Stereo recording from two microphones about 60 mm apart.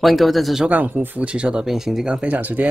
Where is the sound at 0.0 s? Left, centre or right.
Centre.